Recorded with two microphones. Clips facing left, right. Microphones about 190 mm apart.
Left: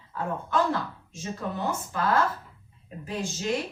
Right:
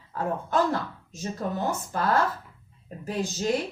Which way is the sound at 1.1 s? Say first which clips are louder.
Right 4 dB; 40° right (ahead or behind).